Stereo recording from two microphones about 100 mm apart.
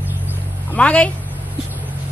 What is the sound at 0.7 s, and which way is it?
Speech, 15° left (ahead or behind).